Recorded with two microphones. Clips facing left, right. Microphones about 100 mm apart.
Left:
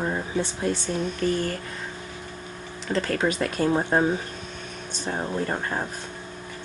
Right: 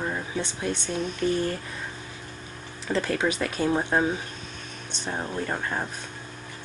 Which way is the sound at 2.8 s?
5° right (ahead or behind).